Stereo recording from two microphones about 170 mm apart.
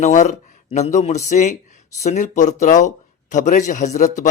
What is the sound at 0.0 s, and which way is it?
A man's voice, 45° left (ahead or behind).